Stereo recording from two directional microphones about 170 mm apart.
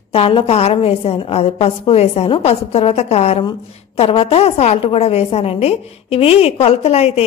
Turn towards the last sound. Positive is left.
turn(degrees=40)  # may be behind; listen again after turning